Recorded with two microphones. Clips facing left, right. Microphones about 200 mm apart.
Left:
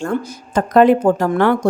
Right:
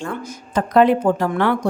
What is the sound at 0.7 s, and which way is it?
Speech, 45° left (ahead or behind).